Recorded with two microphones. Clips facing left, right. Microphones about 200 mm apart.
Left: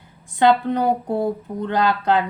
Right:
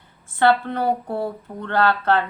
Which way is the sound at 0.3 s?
15° left (ahead or behind).